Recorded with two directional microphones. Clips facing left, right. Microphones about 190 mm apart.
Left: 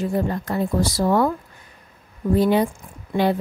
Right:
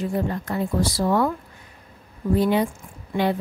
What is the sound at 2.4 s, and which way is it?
Speech, 40° left (ahead or behind).